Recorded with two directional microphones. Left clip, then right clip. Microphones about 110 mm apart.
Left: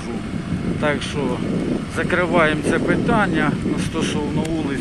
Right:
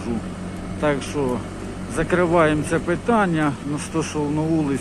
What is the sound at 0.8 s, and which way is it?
Speech, 10° right (ahead or behind).